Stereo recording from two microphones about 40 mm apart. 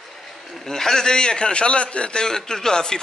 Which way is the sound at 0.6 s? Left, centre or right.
Centre.